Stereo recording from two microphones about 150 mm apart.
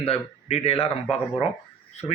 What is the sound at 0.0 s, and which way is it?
Speech, 45° left (ahead or behind).